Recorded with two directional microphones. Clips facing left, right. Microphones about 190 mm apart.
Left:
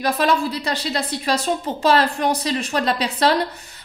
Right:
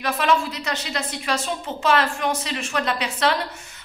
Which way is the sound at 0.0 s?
35° left (ahead or behind).